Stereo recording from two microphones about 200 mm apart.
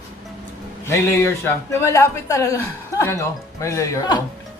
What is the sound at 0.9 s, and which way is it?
Speech, 15° left (ahead or behind).